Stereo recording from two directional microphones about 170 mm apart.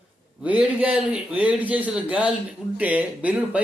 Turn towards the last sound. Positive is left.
turn(degrees=-10)  # may be behind; listen again after turning